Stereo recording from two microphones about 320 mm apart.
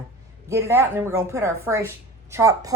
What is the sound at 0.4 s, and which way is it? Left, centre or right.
A woman's voice, centre.